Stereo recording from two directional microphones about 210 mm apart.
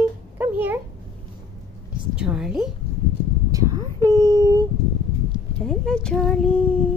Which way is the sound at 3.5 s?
15° right (ahead or behind).